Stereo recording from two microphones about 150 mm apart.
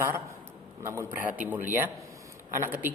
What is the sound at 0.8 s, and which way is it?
A man's voice, 15° right (ahead or behind).